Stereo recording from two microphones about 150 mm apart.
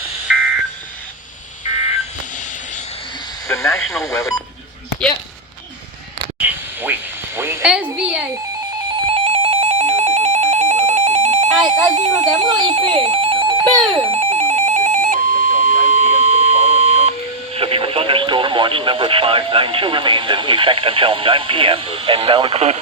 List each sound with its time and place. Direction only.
0.3 s fire alarm: centre (ahead or behind)
3.4 s radio: 20° left (ahead or behind)
3.8 s radio: centre (ahead or behind)
6.4 s a sound: 10° right (ahead or behind)
7.9 s music: 5° right (ahead or behind)
9.0 s music: 40° right (ahead or behind)